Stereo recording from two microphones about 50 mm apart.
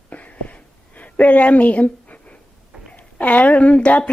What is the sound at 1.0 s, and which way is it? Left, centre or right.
A woman's voice, left.